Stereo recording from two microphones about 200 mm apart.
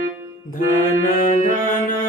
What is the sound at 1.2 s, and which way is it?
Speech, 40° left (ahead or behind).